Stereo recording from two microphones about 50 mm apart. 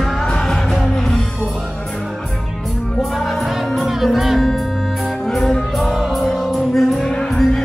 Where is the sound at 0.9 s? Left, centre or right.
Centre.